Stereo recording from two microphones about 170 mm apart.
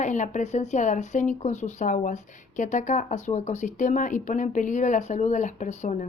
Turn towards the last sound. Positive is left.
turn(degrees=45)  # may be behind; listen again after turning